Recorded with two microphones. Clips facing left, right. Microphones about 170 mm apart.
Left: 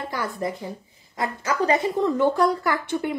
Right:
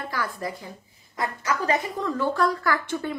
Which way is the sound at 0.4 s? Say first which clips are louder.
Left 5 dB; 25° left (ahead or behind).